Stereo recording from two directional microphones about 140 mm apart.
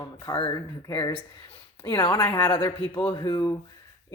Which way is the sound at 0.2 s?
35° left (ahead or behind).